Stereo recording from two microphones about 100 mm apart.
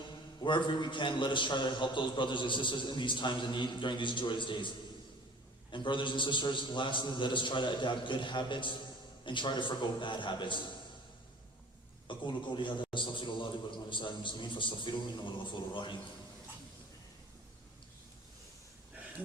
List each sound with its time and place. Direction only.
0.4 s a man's voice: 50° left (ahead or behind)
5.7 s a man's voice: 55° left (ahead or behind)
12.0 s a man's voice: 50° left (ahead or behind)